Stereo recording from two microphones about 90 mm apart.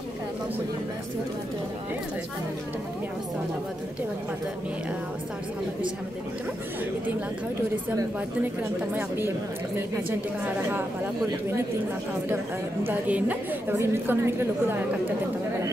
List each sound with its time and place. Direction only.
8.9 s a woman's voice: 25° right (ahead or behind)
12.8 s a woman's voice: 20° right (ahead or behind)